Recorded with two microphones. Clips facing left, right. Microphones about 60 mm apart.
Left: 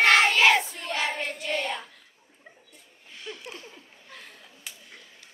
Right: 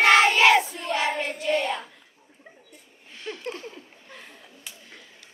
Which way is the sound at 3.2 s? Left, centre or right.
Right.